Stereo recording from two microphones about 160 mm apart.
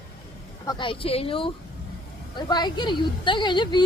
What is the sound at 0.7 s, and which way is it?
A woman's voice, 30° left (ahead or behind).